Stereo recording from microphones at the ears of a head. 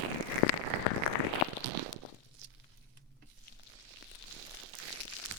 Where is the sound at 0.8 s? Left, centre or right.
Left.